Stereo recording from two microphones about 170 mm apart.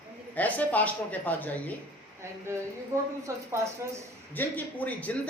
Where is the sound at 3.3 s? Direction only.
15° right (ahead or behind).